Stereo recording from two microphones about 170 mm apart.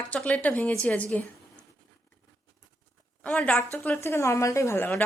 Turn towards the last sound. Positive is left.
turn(degrees=15)  # may be behind; listen again after turning